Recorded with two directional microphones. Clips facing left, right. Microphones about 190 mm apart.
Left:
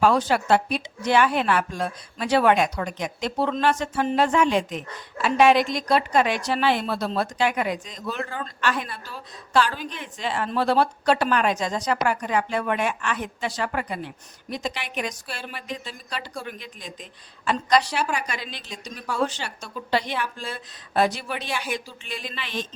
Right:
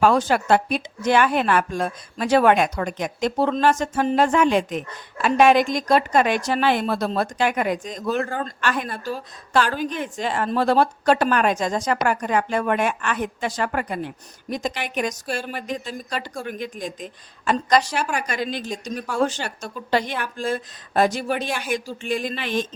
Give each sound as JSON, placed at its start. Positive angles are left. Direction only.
{"t": 0.0, "sound": "speech", "side_deg": -50}